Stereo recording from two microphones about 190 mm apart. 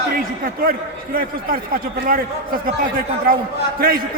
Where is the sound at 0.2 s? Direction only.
50° right (ahead or behind).